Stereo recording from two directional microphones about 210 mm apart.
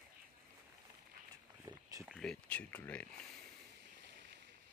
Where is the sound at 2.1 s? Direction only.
Centre (ahead or behind).